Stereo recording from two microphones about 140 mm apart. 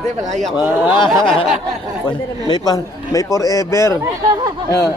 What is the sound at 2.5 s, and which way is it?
A man's voice, 25° left (ahead or behind).